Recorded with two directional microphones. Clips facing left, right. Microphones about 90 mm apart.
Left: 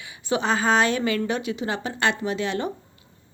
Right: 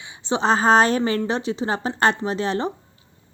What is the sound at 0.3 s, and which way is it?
A woman's voice, 35° right (ahead or behind).